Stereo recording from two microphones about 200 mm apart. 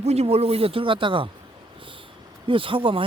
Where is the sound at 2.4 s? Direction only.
25° right (ahead or behind).